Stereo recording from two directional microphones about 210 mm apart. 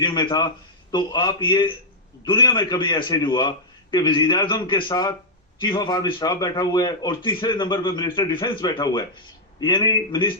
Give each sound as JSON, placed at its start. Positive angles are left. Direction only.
{"t": 0.0, "sound": "a man's voice", "side_deg": 20}